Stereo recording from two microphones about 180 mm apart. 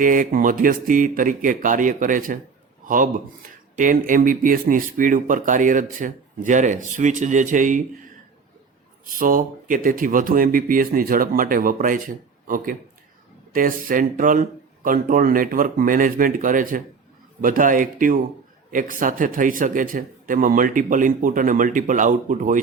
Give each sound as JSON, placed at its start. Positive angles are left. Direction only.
{"t": 0.0, "sound": "a man's voice", "side_deg": -50}
{"t": 9.0, "sound": "speech", "side_deg": -50}